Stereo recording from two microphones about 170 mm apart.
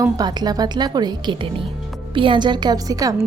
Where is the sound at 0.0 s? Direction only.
25° right (ahead or behind).